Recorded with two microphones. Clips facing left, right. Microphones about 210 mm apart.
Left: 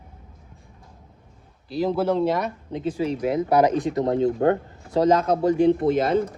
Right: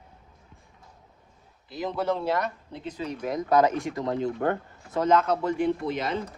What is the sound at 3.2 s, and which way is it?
Speech, 25° left (ahead or behind).